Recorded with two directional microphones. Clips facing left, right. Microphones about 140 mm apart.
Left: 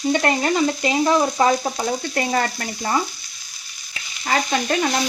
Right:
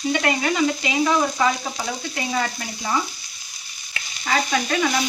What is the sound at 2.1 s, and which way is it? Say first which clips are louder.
Speech: left 2 dB; 55° left (ahead or behind).